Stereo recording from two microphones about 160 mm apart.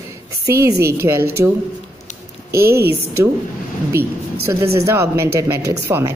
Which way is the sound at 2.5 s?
15° right (ahead or behind).